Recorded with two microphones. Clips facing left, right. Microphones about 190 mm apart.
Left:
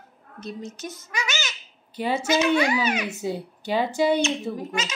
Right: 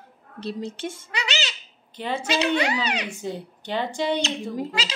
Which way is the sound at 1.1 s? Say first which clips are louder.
Left 1 dB; 65° right (ahead or behind).